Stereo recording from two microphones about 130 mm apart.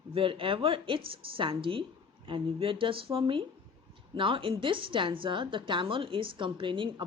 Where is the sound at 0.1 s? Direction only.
45° right (ahead or behind).